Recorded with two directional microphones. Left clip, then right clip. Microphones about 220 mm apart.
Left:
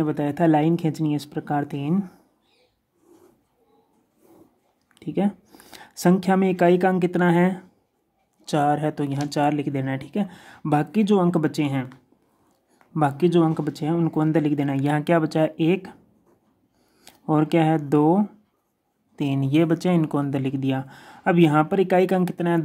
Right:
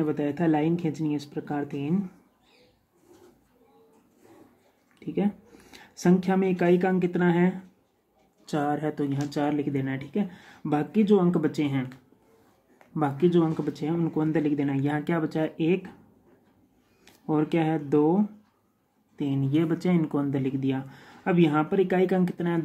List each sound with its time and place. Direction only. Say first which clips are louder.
0.0 s speech: left 5 dB; 45° left (ahead or behind)
4.9 s speech: left 4 dB; 50° left (ahead or behind)
12.9 s speech: left 4 dB; 45° left (ahead or behind)
17.0 s speech: left 5 dB; 50° left (ahead or behind)